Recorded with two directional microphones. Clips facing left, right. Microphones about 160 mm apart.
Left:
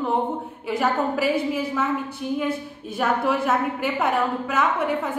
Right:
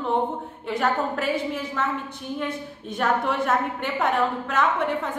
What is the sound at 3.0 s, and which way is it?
A woman's voice, 5° left (ahead or behind).